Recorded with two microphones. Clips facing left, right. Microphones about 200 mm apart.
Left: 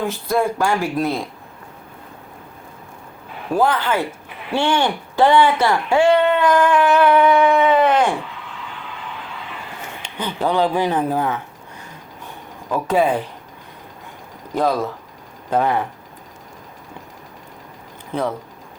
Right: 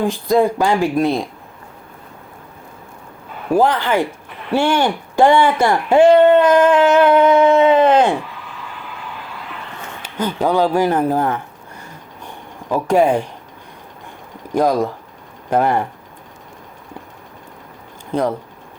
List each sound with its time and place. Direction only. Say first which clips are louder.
0.0 s speech: right 5 dB; 15° right (ahead or behind)
3.5 s speech: right 3 dB; 15° right (ahead or behind)
6.1 s a sound: right 7 dB; 45° right (ahead or behind)
6.4 s a sound: right 4 dB; 20° right (ahead or behind)
10.2 s speech: right 3 dB; 10° right (ahead or behind)
12.7 s speech: right 3 dB; 10° right (ahead or behind)
14.5 s speech: right 4 dB; 15° right (ahead or behind)
18.1 s speech: right 4 dB; 15° right (ahead or behind)